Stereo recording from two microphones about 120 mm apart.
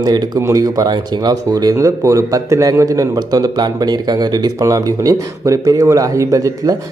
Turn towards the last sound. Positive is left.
turn(degrees=-30)  # may be behind; listen again after turning